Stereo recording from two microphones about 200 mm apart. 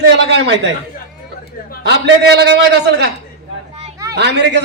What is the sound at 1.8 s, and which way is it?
A man's voice, 55° right (ahead or behind).